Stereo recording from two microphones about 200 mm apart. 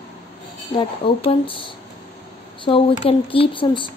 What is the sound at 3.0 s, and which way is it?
Speech, 25° left (ahead or behind).